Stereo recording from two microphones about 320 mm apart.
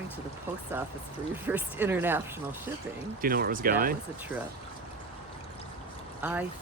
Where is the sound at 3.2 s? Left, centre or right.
Right.